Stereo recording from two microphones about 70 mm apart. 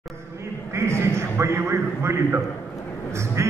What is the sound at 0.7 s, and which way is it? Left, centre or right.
A man's voice, right.